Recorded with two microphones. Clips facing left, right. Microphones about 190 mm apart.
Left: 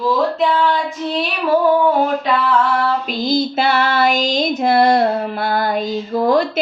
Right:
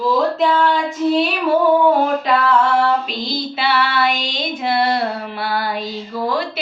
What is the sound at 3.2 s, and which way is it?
Female singing, 45° left (ahead or behind).